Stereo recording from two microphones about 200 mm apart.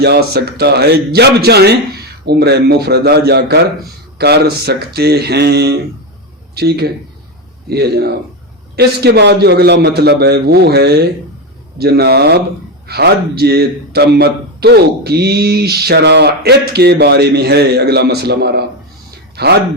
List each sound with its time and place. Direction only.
0.0 s a man's voice: 55° right (ahead or behind)